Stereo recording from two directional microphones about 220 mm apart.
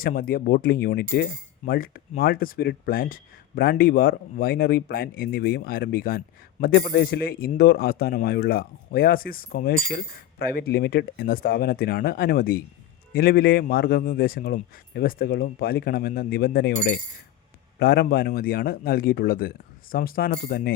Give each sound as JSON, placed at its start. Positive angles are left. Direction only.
{"t": 0.0, "sound": "speech", "side_deg": 40}